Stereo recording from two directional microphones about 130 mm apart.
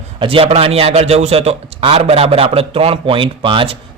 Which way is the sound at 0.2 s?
45° right (ahead or behind).